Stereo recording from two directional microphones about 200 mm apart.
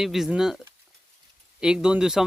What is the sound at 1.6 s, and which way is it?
Speech, 5° right (ahead or behind).